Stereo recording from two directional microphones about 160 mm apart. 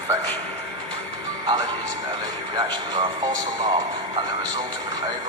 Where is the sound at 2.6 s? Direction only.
30° right (ahead or behind).